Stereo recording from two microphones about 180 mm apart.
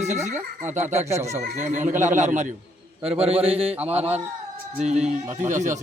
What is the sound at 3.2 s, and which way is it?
Speech, 35° right (ahead or behind).